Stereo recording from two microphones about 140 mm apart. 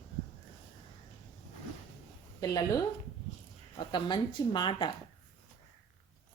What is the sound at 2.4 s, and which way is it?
Speech, 25° left (ahead or behind).